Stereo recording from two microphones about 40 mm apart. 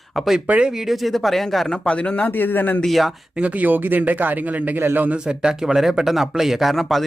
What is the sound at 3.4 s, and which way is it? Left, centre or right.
Speech, right.